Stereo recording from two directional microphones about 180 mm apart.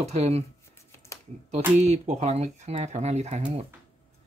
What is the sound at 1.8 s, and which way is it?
Speech, 40° right (ahead or behind).